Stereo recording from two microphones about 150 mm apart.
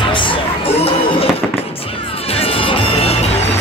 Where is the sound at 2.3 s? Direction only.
40° left (ahead or behind).